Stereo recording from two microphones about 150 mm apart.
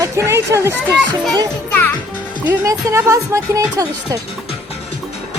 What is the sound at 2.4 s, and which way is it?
Speech, 20° right (ahead or behind).